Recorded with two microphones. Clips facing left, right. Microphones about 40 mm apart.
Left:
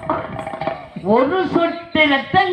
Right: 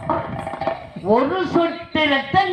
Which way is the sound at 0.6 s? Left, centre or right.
Left.